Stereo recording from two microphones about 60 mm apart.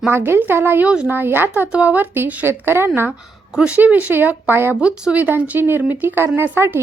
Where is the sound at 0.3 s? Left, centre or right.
Right.